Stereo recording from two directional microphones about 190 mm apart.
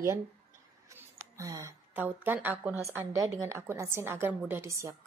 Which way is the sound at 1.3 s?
15° right (ahead or behind).